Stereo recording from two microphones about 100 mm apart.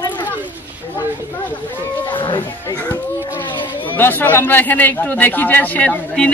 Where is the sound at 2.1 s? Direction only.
55° left (ahead or behind).